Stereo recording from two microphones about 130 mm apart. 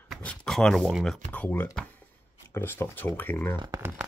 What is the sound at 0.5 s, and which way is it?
Speech, 5° left (ahead or behind).